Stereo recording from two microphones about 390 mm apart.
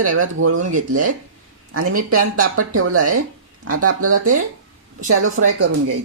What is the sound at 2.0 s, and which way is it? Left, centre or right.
Speech, right.